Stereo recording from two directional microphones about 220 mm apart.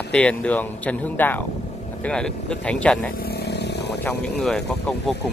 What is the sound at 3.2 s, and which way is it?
Vehicle, 45° left (ahead or behind).